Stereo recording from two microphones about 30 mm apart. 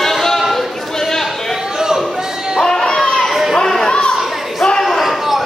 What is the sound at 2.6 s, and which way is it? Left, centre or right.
Baby cry, centre.